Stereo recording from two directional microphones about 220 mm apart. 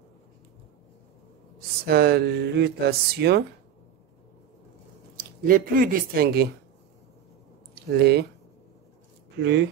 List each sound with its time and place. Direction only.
1.9 s speech: 45° right (ahead or behind)
5.1 s speech: 40° right (ahead or behind)
7.7 s speech: 45° right (ahead or behind)
9.4 s speech: 50° right (ahead or behind)